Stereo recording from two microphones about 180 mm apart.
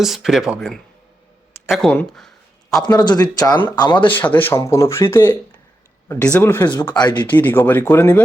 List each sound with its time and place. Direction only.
0.0 s speech: centre (ahead or behind)
1.6 s a sound: centre (ahead or behind)
2.8 s speech: 25° left (ahead or behind)
4.1 s speech: 10° left (ahead or behind)
6.9 s speech: 25° left (ahead or behind)
7.3 s speech: 10° left (ahead or behind)